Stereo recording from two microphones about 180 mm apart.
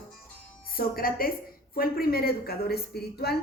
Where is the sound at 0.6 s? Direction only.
55° left (ahead or behind).